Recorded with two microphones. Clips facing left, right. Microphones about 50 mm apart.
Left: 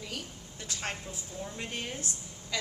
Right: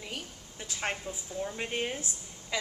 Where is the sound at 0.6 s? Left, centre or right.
Right.